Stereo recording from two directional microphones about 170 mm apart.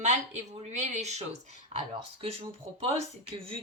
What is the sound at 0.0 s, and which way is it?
Speech, 40° right (ahead or behind).